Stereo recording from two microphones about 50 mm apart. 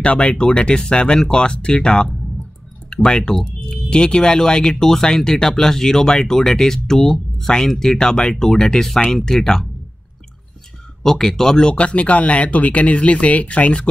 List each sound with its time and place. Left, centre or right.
0.0 s speech: left
11.0 s speech: centre
11.7 s speech: left